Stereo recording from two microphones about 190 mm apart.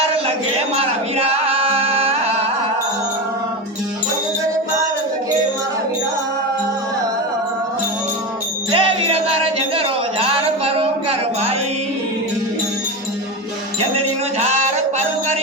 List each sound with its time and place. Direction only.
0.8 s music: 30° right (ahead or behind)
8.7 s music: 30° right (ahead or behind)
9.7 s a sound: 30° right (ahead or behind)
13.9 s music: 35° right (ahead or behind)